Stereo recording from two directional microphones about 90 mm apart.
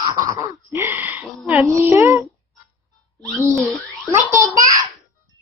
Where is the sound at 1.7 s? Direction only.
25° right (ahead or behind).